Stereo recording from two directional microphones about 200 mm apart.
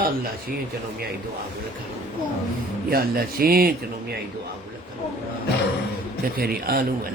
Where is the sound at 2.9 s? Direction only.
50° right (ahead or behind).